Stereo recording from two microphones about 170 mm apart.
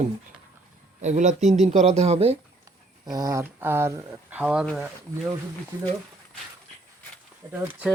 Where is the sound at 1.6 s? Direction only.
40° right (ahead or behind).